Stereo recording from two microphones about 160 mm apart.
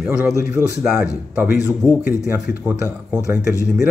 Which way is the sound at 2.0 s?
10° right (ahead or behind).